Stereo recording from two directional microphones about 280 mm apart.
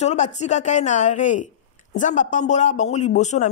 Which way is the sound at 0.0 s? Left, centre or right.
Left.